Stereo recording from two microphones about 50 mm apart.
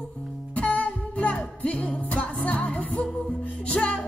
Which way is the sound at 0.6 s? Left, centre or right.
Left.